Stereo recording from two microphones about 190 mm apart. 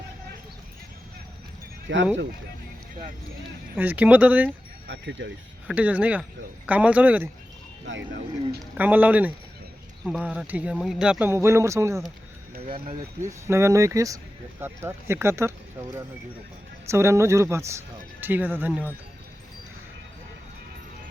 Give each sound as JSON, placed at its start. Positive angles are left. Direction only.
{"t": 1.9, "sound": "speech", "side_deg": -70}
{"t": 3.8, "sound": "speech", "side_deg": -10}
{"t": 4.9, "sound": "speech", "side_deg": -70}
{"t": 5.6, "sound": "speech", "side_deg": -10}
{"t": 7.9, "sound": "speech", "side_deg": -75}
{"t": 8.8, "sound": "speech", "side_deg": -10}
{"t": 12.6, "sound": "speech", "side_deg": -30}
{"t": 13.2, "sound": "speech", "side_deg": -15}
{"t": 16.8, "sound": "speech", "side_deg": -15}